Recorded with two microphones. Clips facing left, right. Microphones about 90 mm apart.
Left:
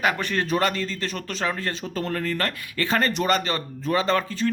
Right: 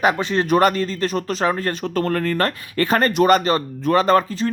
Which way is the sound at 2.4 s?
40° right (ahead or behind).